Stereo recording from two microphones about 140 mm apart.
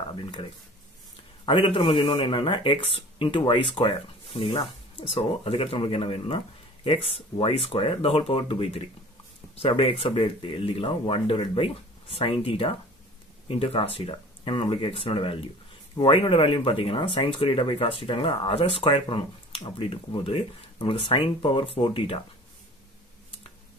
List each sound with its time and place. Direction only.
0.1 s speech: 35° left (ahead or behind)